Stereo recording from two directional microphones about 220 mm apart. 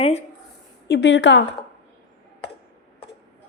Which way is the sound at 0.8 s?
50° left (ahead or behind).